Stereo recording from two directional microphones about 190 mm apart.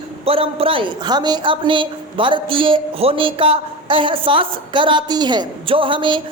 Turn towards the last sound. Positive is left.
turn(degrees=-25)  # may be behind; listen again after turning